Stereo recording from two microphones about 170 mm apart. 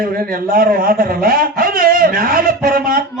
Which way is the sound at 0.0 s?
60° right (ahead or behind).